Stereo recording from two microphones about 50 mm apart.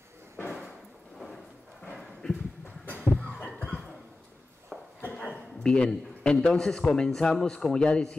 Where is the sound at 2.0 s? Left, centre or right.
Centre.